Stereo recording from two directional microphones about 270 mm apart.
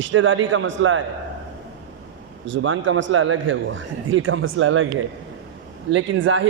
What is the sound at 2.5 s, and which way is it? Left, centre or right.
A man's voice, right.